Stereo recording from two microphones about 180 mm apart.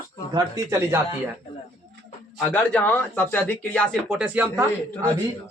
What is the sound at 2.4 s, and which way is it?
A man's voice, 10° left (ahead or behind).